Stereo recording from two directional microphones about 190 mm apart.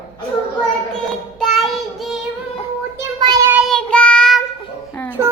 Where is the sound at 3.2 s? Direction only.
20° right (ahead or behind).